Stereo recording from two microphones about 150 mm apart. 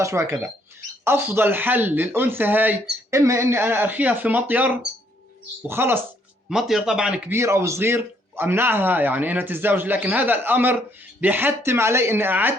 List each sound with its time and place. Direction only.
0.0 s a man's voice: 20° right (ahead or behind)
6.5 s speech: 5° right (ahead or behind)
7.3 s a man's voice: 15° right (ahead or behind)